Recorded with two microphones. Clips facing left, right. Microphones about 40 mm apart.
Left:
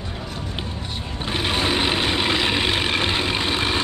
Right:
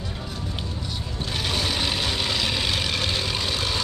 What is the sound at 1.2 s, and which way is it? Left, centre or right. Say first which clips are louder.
Vehicle: left 5 dB; left.